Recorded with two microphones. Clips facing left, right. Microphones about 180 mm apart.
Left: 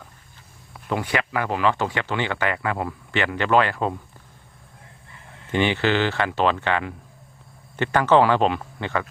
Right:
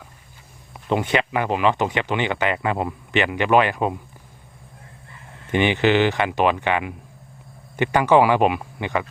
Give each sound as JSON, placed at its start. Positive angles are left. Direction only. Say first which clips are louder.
{"t": 0.7, "sound": "speech", "louder": "right 4 dB", "side_deg": -20}
{"t": 5.5, "sound": "speech", "louder": "right 3 dB", "side_deg": -15}